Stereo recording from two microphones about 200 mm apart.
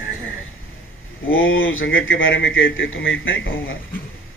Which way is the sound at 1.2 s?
90° left.